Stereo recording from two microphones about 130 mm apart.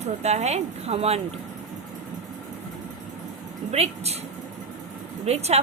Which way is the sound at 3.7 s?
55° right (ahead or behind).